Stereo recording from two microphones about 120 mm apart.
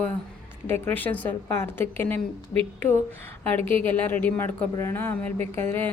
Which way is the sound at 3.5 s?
20° left (ahead or behind).